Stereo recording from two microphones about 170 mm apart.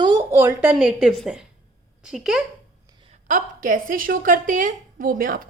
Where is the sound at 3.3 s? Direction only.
50° right (ahead or behind).